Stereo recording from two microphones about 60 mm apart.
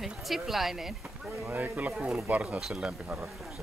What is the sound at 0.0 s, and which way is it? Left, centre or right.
Speech, centre.